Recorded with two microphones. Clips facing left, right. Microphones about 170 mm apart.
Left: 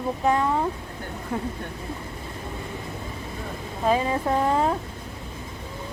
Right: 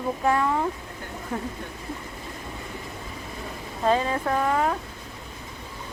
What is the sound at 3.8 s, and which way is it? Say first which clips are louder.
Speech: even; 10° left (ahead or behind).